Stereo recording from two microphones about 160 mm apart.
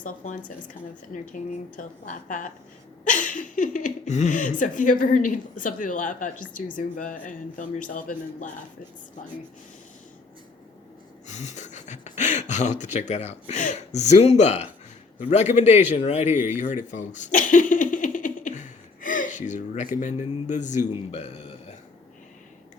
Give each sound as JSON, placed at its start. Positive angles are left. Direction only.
{"t": 0.0, "sound": "a woman's voice", "side_deg": 55}
{"t": 11.3, "sound": "speech", "side_deg": 45}
{"t": 16.3, "sound": "speech", "side_deg": -10}
{"t": 16.6, "sound": "a sound", "side_deg": 50}
{"t": 20.0, "sound": "speech", "side_deg": 50}
{"t": 21.1, "sound": "burping", "side_deg": 45}